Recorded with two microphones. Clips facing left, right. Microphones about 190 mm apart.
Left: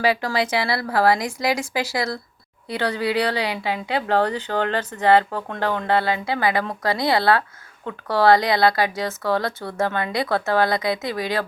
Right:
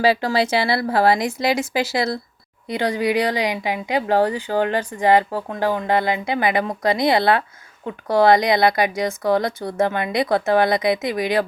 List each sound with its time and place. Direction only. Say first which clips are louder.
0.0 s a woman's voice: right 3 dB; 30° right (ahead or behind)